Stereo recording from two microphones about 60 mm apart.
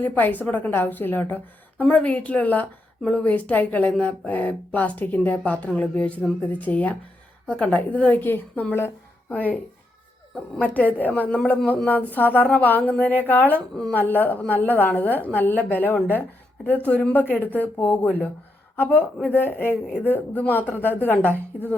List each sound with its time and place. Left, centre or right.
0.0 s a woman's voice: left
1.8 s a woman's voice: left
8.2 s a woman's voice: left
10.6 s a woman's voice: left